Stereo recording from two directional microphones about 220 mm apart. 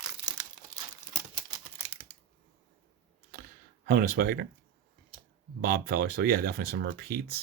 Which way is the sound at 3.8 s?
40° right (ahead or behind).